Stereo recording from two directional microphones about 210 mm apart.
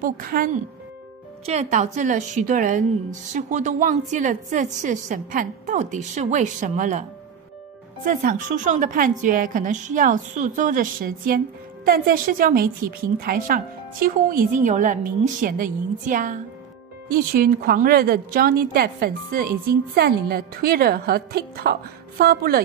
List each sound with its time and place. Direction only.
0.0 s a woman's voice: 45° right (ahead or behind)
1.4 s a woman's voice: 30° right (ahead or behind)